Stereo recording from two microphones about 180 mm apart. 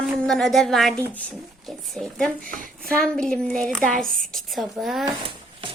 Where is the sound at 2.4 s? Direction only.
50° right (ahead or behind).